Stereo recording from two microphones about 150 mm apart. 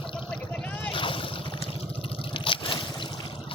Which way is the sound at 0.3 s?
5° left (ahead or behind).